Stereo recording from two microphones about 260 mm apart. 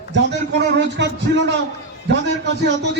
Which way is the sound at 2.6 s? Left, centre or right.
Right.